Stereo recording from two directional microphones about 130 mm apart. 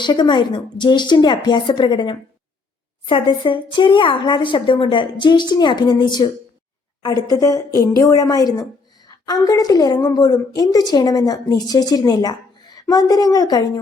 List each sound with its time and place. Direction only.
0.0 s a woman's voice: 35° left (ahead or behind)